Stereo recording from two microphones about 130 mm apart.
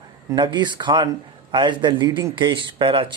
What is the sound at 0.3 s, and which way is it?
Speech, 35° right (ahead or behind).